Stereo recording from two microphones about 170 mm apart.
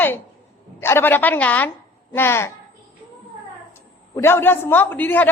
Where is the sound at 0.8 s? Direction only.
15° left (ahead or behind).